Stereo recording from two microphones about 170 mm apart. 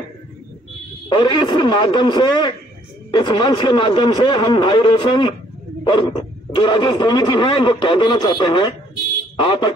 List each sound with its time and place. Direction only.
1.0 s speech: 25° left (ahead or behind)